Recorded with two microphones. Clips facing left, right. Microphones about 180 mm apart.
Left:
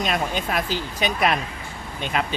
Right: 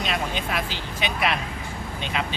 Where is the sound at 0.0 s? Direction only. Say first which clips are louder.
Left 3 dB; 45° left (ahead or behind).